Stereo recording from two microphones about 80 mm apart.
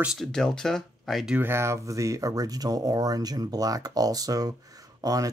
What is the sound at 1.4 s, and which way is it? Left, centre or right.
Speech, right.